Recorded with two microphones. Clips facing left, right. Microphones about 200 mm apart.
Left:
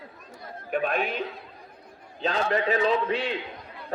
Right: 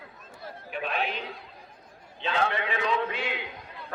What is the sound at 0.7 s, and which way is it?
Speech, 50° left (ahead or behind).